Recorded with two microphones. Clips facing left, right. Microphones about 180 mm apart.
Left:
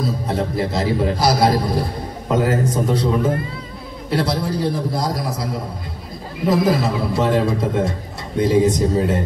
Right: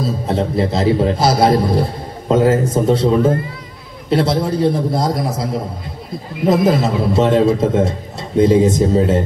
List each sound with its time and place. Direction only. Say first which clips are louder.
0.0 s a man's voice: right 3 dB; 25° right (ahead or behind)
4.1 s a man's voice: right 5 dB; 25° right (ahead or behind)